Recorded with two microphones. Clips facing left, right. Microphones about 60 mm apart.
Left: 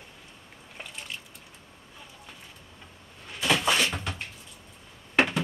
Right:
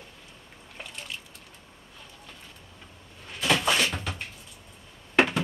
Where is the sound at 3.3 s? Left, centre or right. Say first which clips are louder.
Even; centre.